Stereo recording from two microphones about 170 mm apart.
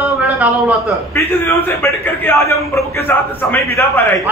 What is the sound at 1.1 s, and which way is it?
A man's voice, 15° left (ahead or behind).